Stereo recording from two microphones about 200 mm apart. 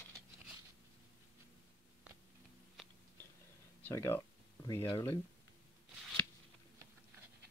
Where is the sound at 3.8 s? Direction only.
10° left (ahead or behind).